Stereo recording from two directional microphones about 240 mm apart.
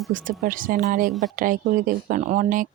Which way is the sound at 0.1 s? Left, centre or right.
Right.